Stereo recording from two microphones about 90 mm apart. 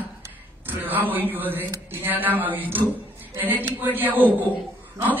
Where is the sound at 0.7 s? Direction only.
20° right (ahead or behind).